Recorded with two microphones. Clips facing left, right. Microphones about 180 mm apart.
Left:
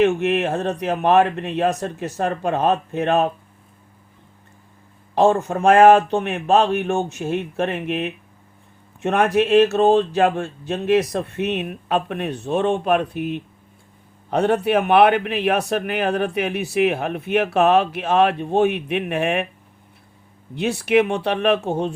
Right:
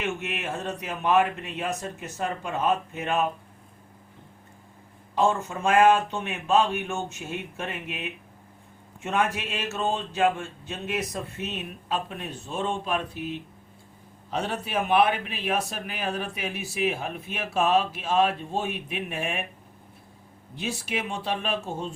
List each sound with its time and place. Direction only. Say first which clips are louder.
0.0 s a man's voice: left 13 dB; 65° left (ahead or behind)
5.1 s a man's voice: left 8 dB; 65° left (ahead or behind)
9.7 s a man's voice: left 12 dB; 60° left (ahead or behind)
20.6 s speech: left 14 dB; 65° left (ahead or behind)